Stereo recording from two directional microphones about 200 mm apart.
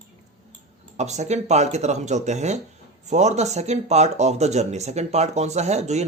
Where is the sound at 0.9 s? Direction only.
35° right (ahead or behind).